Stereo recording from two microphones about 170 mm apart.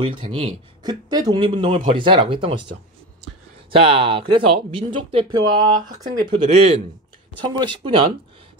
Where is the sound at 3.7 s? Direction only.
35° right (ahead or behind).